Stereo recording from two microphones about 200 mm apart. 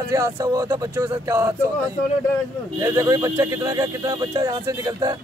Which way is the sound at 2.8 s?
15° right (ahead or behind).